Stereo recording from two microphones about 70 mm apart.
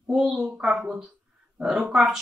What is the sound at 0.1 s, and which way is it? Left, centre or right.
Speech, centre.